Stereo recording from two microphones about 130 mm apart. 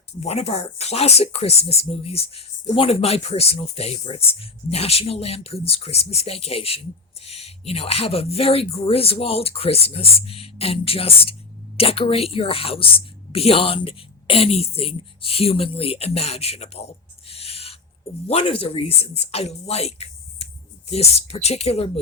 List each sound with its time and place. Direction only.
0.2 s speech: 55° left (ahead or behind)